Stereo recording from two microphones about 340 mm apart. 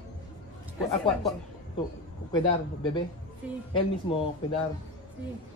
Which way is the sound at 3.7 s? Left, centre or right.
Centre.